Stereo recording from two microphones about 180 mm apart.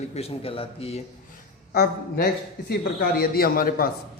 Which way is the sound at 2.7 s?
60° left (ahead or behind).